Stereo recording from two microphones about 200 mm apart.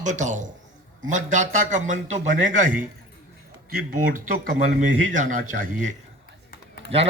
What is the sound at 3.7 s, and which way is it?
Speech, 45° right (ahead or behind).